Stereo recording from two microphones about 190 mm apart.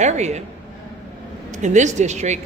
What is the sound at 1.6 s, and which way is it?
Speech, 40° right (ahead or behind).